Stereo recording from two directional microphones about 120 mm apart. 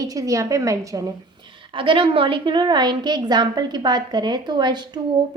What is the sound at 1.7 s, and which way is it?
A woman's voice, 45° right (ahead or behind).